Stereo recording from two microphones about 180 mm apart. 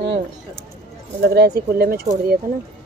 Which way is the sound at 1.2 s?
60° right (ahead or behind).